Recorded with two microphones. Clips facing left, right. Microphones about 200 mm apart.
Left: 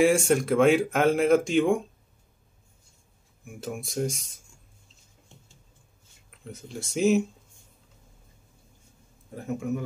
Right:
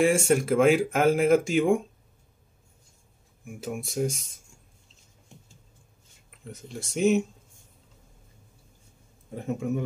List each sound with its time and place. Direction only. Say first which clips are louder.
0.0 s speech: left 1 dB; centre (ahead or behind)
3.4 s speech: right 1 dB; 5° right (ahead or behind)
6.4 s speech: left 1 dB; centre (ahead or behind)
9.3 s a man's voice: right 1 dB; 25° right (ahead or behind)